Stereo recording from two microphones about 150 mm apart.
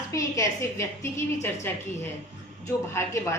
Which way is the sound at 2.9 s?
20° left (ahead or behind).